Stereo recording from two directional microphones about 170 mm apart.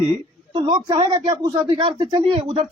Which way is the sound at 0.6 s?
25° right (ahead or behind).